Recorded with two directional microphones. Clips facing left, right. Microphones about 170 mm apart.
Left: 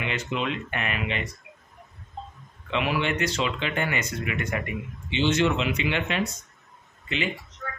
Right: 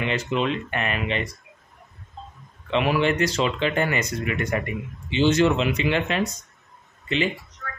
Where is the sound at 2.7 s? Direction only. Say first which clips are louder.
Right 5 dB; 35° right (ahead or behind).